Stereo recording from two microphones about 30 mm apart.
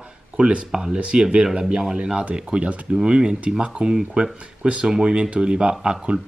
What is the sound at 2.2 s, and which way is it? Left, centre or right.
Speech, right.